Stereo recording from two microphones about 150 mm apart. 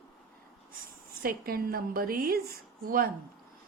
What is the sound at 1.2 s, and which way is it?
A woman's voice, 80° right.